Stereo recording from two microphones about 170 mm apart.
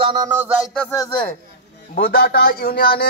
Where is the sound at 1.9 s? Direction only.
60° left (ahead or behind).